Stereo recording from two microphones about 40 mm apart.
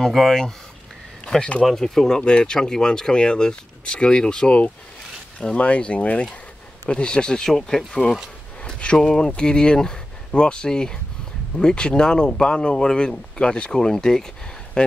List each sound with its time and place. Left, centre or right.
0.0 s speech: centre
1.8 s speech: centre
5.4 s speech: left; by 8.2 s centre
8.6 s speech: left
8.9 s speech: centre